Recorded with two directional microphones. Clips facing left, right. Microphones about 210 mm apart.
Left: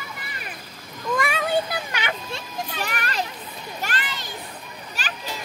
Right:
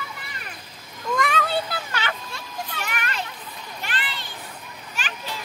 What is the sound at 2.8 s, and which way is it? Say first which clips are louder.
Children playing: left 3 dB; 35° left (ahead or behind).